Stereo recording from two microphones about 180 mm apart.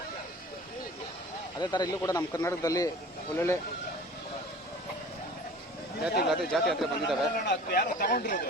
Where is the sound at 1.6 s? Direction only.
25° left (ahead or behind).